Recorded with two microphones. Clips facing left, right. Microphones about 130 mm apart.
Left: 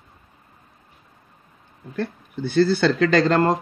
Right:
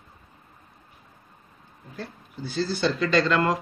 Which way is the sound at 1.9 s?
70° left (ahead or behind).